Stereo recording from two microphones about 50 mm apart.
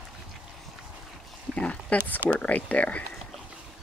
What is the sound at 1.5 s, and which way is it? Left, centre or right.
Speech, left.